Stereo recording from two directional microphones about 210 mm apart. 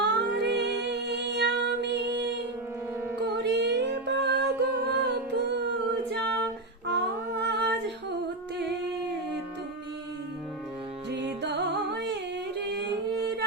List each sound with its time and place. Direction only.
0.0 s female singing: 50° right (ahead or behind)
3.3 s music: 55° right (ahead or behind)
6.1 s a capella: 50° right (ahead or behind)
7.4 s humming: 55° right (ahead or behind)
11.1 s music: 50° right (ahead or behind)